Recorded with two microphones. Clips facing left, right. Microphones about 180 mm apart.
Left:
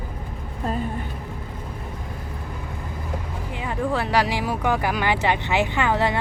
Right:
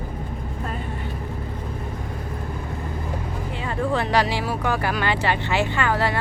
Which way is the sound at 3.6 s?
10° left (ahead or behind).